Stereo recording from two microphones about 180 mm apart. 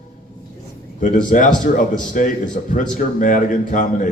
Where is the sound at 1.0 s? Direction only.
45° left (ahead or behind).